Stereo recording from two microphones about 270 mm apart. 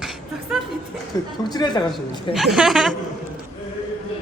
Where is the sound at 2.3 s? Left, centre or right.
Centre.